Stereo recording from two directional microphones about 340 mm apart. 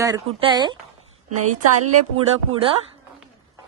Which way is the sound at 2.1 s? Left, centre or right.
Centre.